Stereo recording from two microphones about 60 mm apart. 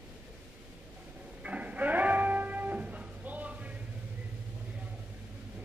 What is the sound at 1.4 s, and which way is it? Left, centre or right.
Livestock, right.